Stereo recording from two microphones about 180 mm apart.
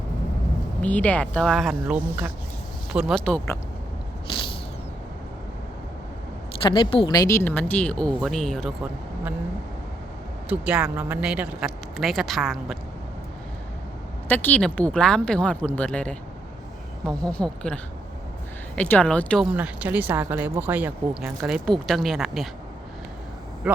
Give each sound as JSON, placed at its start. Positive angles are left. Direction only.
{"t": 0.8, "sound": "speech", "side_deg": 10}
{"t": 4.3, "sound": "a sound", "side_deg": 25}
{"t": 6.6, "sound": "speech", "side_deg": 25}
{"t": 10.5, "sound": "speech", "side_deg": -5}
{"t": 14.3, "sound": "speech", "side_deg": 10}
{"t": 17.2, "sound": "speech", "side_deg": 5}
{"t": 18.8, "sound": "speech", "side_deg": 5}
{"t": 19.5, "sound": "speech", "side_deg": -10}
{"t": 23.6, "sound": "speech", "side_deg": -5}